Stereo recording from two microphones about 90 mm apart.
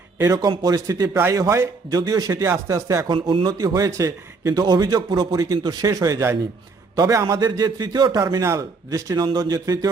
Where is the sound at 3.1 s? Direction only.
65° right (ahead or behind).